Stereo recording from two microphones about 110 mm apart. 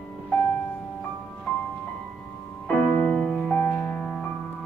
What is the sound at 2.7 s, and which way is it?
Music, 15° left (ahead or behind).